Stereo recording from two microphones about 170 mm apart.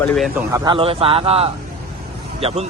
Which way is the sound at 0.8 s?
30° right (ahead or behind).